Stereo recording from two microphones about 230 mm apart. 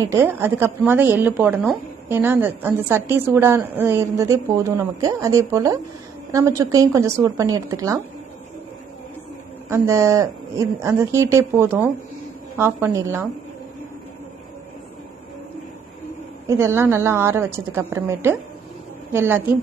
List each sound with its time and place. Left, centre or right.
0.0 s a woman's voice: centre
9.7 s a woman's voice: centre
16.4 s a woman's voice: centre